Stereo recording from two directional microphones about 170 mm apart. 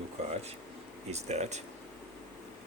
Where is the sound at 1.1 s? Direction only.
40° right (ahead or behind).